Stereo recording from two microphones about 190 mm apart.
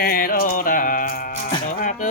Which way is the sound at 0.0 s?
50° left (ahead or behind).